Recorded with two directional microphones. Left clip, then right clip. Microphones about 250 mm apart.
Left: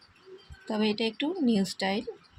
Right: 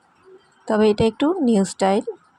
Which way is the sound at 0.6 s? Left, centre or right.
Right.